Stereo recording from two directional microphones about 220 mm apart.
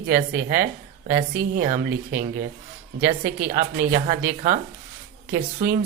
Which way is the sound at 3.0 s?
35° right (ahead or behind).